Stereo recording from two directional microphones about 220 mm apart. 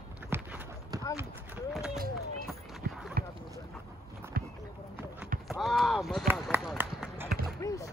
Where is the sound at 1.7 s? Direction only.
Centre (ahead or behind).